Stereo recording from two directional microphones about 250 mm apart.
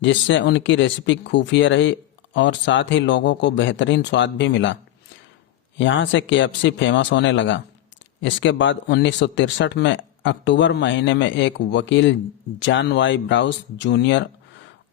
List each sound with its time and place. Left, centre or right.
0.0 s speech: left